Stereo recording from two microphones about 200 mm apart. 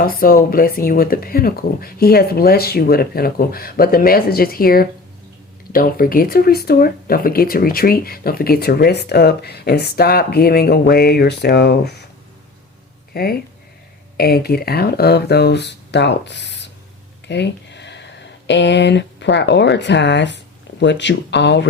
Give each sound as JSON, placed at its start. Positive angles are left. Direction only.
{"t": 0.0, "sound": "speech", "side_deg": 45}
{"t": 13.1, "sound": "speech", "side_deg": 50}